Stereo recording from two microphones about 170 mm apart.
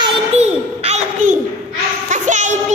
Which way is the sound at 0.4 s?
40° right (ahead or behind).